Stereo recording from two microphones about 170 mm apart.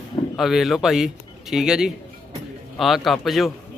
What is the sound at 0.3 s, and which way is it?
A man's voice, centre (ahead or behind).